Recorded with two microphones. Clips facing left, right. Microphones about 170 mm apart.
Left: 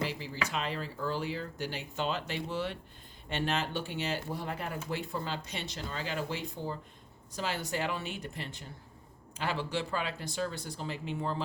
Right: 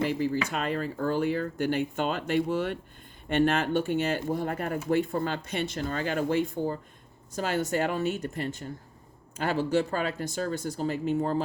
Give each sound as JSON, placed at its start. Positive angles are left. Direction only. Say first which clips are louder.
{"t": 0.0, "sound": "speech", "louder": "right 9 dB", "side_deg": -50}